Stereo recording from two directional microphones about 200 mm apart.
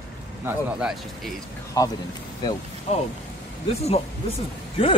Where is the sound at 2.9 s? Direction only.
35° left (ahead or behind).